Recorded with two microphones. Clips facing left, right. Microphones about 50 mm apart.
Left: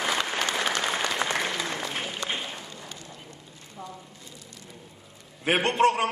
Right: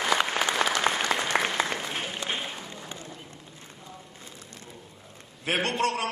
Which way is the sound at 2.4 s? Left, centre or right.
Centre.